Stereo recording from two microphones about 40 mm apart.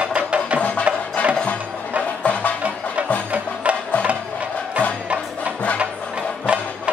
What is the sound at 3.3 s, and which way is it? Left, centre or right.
Music, right.